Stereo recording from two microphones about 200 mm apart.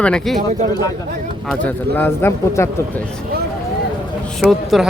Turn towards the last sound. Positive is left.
turn(degrees=0)  # may be behind; listen again after turning